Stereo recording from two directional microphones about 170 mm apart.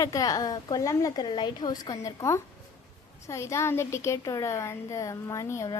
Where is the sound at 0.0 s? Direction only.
20° left (ahead or behind).